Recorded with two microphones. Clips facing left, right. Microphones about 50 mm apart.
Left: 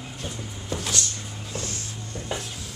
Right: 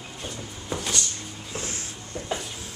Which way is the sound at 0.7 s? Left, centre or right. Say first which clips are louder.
Even; centre.